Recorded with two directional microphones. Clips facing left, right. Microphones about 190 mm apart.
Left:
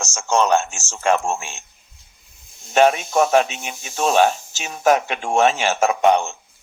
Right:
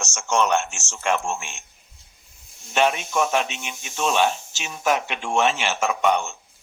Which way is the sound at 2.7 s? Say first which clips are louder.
Left 6 dB; 40° left (ahead or behind).